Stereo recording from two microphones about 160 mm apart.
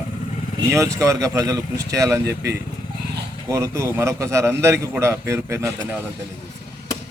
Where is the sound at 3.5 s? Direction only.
20° right (ahead or behind).